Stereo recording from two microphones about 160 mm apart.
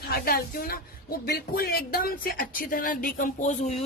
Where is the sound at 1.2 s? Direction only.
80° left; by 3.7 s 55° left (ahead or behind).